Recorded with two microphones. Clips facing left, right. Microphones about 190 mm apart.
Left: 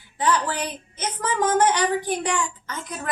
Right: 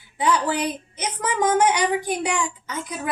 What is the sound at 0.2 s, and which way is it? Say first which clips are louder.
A woman's voice: right 2 dB; 10° right (ahead or behind).